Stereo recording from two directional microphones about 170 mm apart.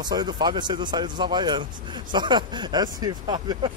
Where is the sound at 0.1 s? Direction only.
25° right (ahead or behind).